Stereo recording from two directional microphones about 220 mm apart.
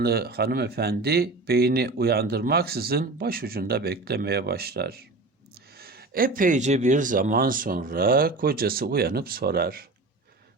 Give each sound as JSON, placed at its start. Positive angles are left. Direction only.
{"t": 0.0, "sound": "speech", "side_deg": -45}